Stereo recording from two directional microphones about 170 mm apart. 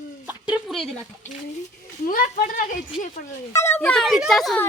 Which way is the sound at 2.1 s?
55° left (ahead or behind).